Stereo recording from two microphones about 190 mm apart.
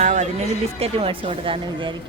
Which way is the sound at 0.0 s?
40° right (ahead or behind).